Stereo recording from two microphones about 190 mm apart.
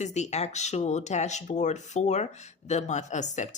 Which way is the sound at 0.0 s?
35° left (ahead or behind).